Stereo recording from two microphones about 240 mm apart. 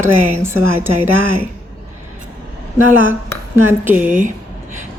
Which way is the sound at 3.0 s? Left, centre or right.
Centre.